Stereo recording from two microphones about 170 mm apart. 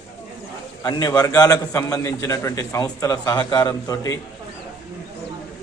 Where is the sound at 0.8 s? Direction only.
20° left (ahead or behind).